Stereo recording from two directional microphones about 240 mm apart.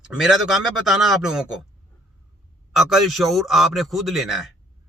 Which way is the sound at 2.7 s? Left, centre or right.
Centre.